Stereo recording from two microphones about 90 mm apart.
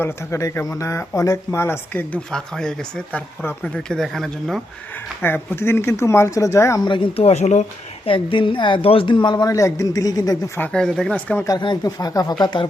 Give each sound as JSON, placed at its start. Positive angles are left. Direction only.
{"t": 0.0, "sound": "speech", "side_deg": 30}
{"t": 2.3, "sound": "speech", "side_deg": 5}
{"t": 3.8, "sound": "speech", "side_deg": 5}
{"t": 5.2, "sound": "speech", "side_deg": 25}
{"t": 6.8, "sound": "a woman's voice", "side_deg": 60}
{"t": 9.5, "sound": "speech", "side_deg": 35}
{"t": 10.6, "sound": "speech", "side_deg": 10}
{"t": 11.6, "sound": "a woman's voice", "side_deg": 55}
{"t": 11.9, "sound": "speech", "side_deg": 45}